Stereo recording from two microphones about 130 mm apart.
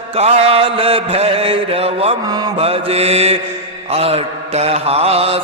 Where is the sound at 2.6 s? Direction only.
50° right (ahead or behind).